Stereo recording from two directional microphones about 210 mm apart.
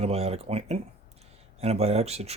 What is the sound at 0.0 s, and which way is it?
Speech, 30° right (ahead or behind).